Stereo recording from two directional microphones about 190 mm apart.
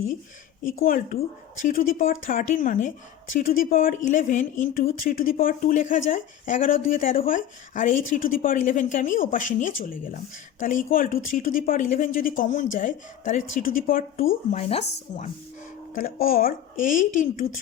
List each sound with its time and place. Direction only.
0.9 s speech: 50° left (ahead or behind)
14.5 s speech: 35° left (ahead or behind)
16.0 s speech: 50° left (ahead or behind)